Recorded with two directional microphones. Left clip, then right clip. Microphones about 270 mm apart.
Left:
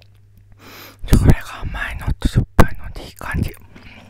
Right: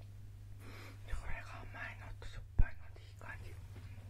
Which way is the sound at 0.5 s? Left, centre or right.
Left.